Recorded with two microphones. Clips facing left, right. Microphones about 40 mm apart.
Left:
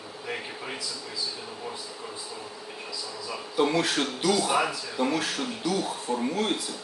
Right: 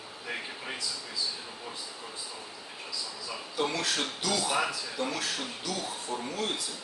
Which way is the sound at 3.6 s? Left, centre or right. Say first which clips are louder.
Left 6 dB; left.